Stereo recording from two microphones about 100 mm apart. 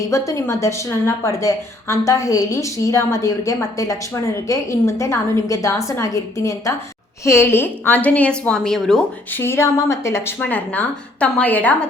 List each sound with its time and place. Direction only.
0.0 s a woman's voice: 30° left (ahead or behind); by 9.0 s 5° left (ahead or behind)
9.3 s speech: 25° left (ahead or behind)